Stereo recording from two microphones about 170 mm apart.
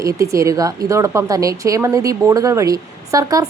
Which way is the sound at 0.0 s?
20° right (ahead or behind).